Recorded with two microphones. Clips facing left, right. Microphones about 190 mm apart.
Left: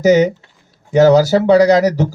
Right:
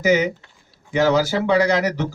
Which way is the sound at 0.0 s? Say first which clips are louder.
Left 7 dB; 40° left (ahead or behind).